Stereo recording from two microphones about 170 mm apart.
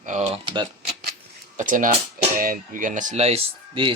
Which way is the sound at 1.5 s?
50° right (ahead or behind).